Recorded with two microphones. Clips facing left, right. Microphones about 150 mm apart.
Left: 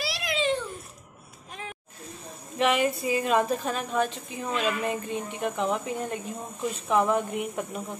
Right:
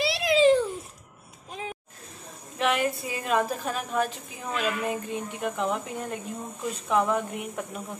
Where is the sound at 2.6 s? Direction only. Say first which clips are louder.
Left 2 dB; centre (ahead or behind).